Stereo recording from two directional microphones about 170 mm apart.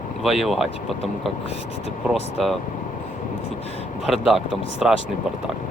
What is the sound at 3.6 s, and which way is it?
Speech, 35° left (ahead or behind).